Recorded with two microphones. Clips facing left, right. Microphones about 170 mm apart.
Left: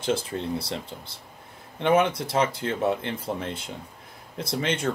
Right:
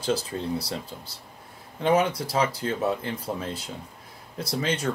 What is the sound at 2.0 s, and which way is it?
Speech, 25° left (ahead or behind).